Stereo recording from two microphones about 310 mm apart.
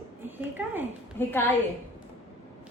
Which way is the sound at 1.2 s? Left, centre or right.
Centre.